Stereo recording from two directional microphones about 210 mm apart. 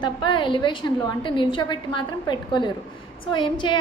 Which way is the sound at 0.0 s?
20° left (ahead or behind).